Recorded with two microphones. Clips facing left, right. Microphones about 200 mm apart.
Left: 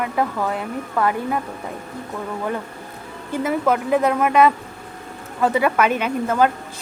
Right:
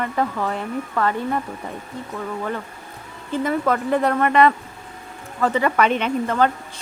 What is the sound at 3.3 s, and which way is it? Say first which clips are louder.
A woman's voice: left 1 dB; 5° left (ahead or behind).